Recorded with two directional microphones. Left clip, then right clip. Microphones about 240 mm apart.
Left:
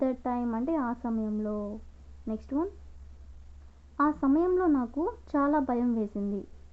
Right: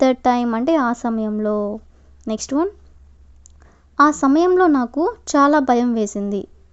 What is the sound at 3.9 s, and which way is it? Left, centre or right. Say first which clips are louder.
A woman's voice: right 12 dB; right.